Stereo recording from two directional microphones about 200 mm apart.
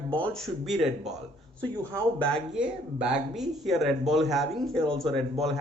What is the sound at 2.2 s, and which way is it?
A man's voice, 5° left (ahead or behind).